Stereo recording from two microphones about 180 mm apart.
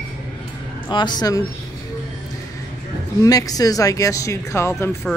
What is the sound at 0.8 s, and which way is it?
Speech, 25° left (ahead or behind).